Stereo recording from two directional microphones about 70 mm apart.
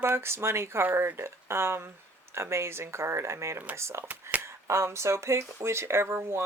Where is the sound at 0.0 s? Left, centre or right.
Right.